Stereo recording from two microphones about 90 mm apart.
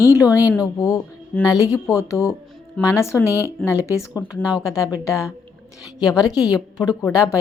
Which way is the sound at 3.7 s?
35° left (ahead or behind).